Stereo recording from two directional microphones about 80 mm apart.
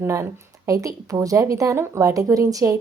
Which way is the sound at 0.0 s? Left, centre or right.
Right.